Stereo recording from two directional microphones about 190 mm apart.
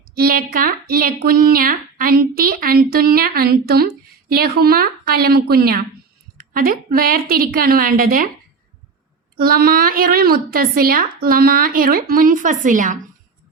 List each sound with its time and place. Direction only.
0.1 s a woman's voice: 55° right (ahead or behind)
9.4 s a woman's voice: 50° right (ahead or behind)